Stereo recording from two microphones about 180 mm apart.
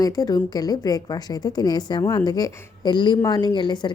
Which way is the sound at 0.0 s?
20° left (ahead or behind).